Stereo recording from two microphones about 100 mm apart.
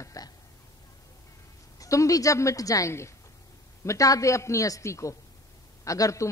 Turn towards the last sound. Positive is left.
turn(degrees=30)  # may be behind; listen again after turning